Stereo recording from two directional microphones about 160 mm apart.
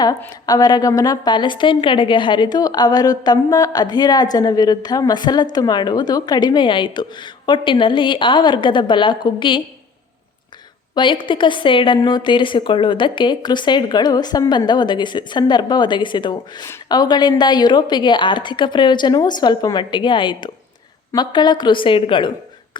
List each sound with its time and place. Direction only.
0.4 s a woman's voice: 25° left (ahead or behind)
10.9 s a woman's voice: 30° left (ahead or behind)